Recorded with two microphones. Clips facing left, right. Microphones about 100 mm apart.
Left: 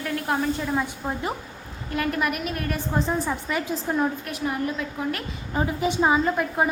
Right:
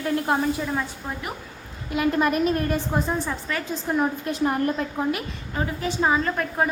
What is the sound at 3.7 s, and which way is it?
Speech, centre (ahead or behind).